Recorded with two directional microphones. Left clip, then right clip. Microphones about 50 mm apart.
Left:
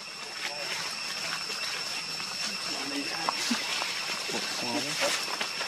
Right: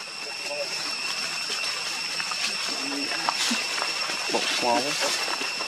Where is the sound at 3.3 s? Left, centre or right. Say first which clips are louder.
Right 4 dB; right.